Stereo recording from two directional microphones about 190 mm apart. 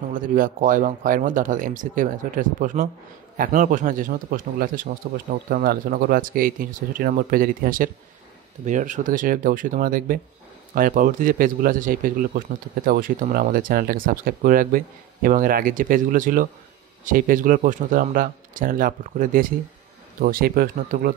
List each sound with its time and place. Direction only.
0.1 s a man's voice: 45° right (ahead or behind)